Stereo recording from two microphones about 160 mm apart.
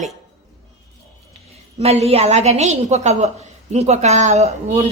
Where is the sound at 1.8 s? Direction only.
40° right (ahead or behind).